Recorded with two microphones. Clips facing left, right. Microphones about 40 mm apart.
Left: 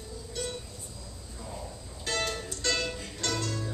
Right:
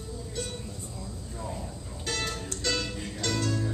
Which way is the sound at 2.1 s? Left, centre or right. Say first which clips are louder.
Left 1 dB; centre.